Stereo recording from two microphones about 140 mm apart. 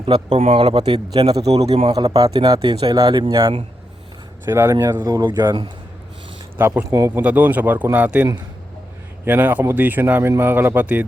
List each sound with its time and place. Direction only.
0.0 s speech: 40° right (ahead or behind)
0.6 s speech: 35° right (ahead or behind)
1.7 s speech: 45° right (ahead or behind)
2.0 s speech: 30° right (ahead or behind)
4.4 s speech: 20° right (ahead or behind)
6.6 s speech: 15° right (ahead or behind)